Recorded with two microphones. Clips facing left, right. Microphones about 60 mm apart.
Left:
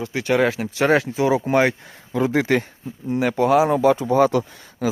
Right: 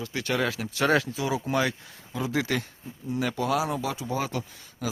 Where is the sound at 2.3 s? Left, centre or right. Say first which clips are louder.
Left 8 dB; left.